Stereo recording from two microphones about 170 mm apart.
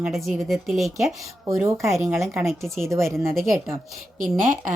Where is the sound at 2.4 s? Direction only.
Centre (ahead or behind).